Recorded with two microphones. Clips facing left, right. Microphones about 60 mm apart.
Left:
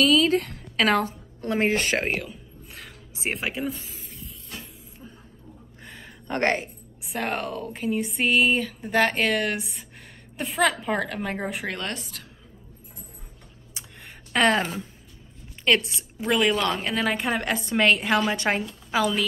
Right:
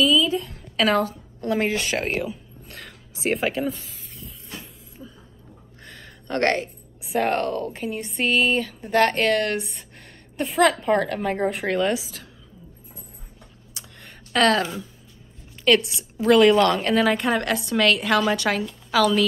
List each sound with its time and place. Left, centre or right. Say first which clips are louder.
0.0 s a woman's voice: even; left
0.7 s a woman's voice: right 1 dB; left
3.3 s speech: right 5 dB; centre
5.0 s a sound: right 3 dB; centre
5.9 s a sound: right 1 dB; centre
7.0 s speech: right 6 dB; centre
13.7 s a sound: even; centre
14.6 s a woman's voice: right 2 dB; left
16.2 s a woman's voice: right 8 dB; centre
17.2 s a woman's voice: right 3 dB; centre